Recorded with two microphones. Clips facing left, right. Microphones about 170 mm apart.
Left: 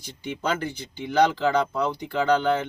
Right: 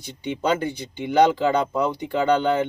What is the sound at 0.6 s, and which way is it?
Speech, 15° right (ahead or behind).